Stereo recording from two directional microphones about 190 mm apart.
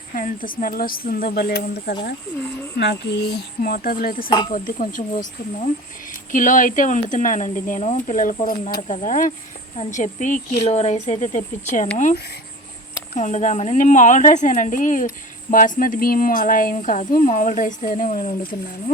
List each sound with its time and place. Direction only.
0.1 s a woman's voice: 45° left (ahead or behind)
4.3 s speech: 25° left (ahead or behind)
4.5 s a woman's voice: 45° left (ahead or behind)
10.7 s speech: 35° left (ahead or behind)
13.1 s a woman's voice: 40° left (ahead or behind)